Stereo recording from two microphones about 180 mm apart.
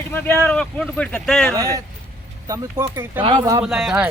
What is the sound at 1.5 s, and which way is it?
Speech, 20° right (ahead or behind).